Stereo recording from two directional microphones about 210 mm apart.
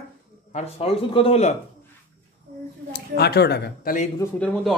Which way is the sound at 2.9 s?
50° left (ahead or behind).